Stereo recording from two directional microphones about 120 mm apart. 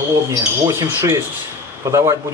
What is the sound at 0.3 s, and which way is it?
A man's voice, 25° right (ahead or behind).